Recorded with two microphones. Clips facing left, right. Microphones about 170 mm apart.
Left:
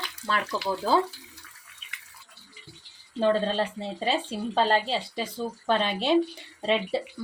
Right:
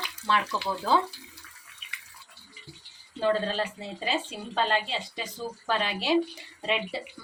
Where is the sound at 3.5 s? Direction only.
30° left (ahead or behind).